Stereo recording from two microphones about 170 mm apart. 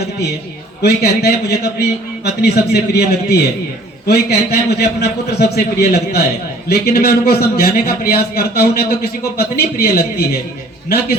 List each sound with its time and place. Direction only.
0.8 s a man's voice: 70° left (ahead or behind)